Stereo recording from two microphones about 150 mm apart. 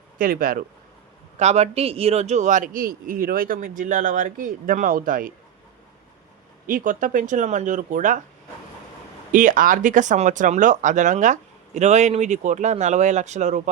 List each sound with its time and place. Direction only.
0.2 s speech: 70° right (ahead or behind)
1.4 s a man's voice: 45° right (ahead or behind); by 5.3 s 65° right (ahead or behind)
6.7 s a man's voice: 65° right (ahead or behind)
9.3 s speech: 60° right (ahead or behind)